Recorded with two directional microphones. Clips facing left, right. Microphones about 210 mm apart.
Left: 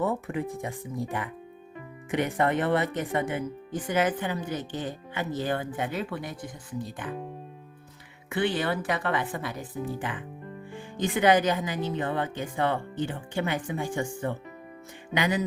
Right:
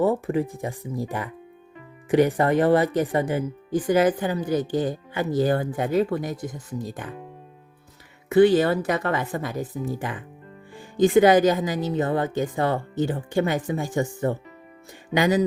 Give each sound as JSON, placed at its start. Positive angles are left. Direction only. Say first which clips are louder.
{"t": 0.0, "sound": "speech", "louder": "right 7 dB", "side_deg": -35}
{"t": 8.3, "sound": "speech", "louder": "right 11 dB", "side_deg": -40}